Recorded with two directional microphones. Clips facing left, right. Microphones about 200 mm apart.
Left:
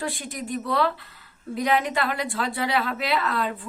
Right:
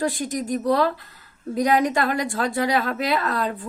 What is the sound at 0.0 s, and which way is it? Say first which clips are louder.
A woman's voice: right 7 dB; 40° right (ahead or behind).